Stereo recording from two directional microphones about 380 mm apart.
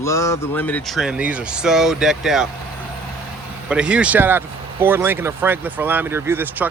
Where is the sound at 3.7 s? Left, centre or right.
Centre.